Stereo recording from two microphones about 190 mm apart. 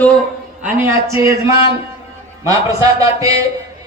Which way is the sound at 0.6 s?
10° right (ahead or behind).